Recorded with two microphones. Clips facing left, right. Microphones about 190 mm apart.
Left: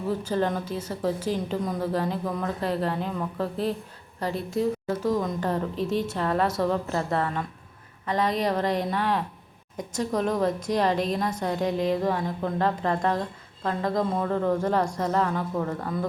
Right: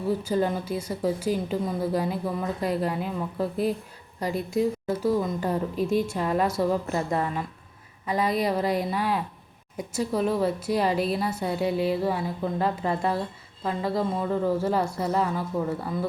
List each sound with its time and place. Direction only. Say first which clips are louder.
0.1 s speech: right 1 dB; 10° right (ahead or behind)